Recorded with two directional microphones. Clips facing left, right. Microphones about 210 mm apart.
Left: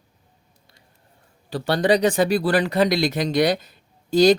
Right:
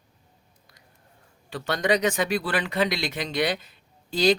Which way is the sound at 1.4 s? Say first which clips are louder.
Left 5 dB; 35° left (ahead or behind).